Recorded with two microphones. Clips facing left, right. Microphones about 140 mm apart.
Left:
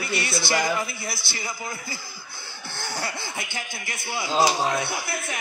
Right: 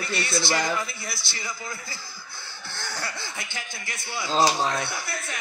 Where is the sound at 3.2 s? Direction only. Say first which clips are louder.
Left 3 dB; 10° left (ahead or behind).